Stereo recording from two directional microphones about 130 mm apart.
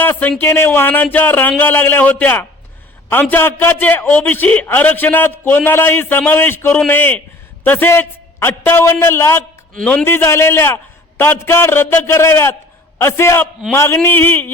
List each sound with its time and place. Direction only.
0.0 s a man's voice: 15° left (ahead or behind)